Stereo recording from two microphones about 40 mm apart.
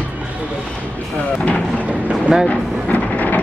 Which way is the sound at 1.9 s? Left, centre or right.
Right.